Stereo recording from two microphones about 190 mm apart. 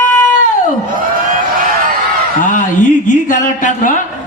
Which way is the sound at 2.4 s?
40° left (ahead or behind).